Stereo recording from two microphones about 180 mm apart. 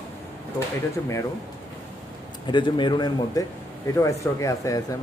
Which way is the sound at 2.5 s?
25° left (ahead or behind).